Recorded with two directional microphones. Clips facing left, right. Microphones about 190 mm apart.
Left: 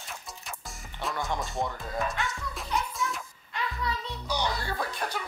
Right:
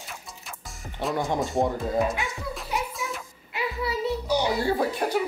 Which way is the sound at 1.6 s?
35° right (ahead or behind).